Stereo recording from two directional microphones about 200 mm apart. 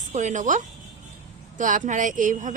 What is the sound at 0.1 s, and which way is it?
A woman's voice, 35° right (ahead or behind).